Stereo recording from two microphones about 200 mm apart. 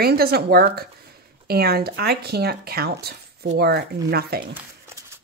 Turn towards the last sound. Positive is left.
turn(degrees=-50)  # may be behind; listen again after turning